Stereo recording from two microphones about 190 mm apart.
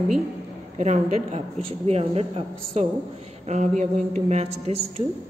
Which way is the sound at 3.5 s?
40° right (ahead or behind).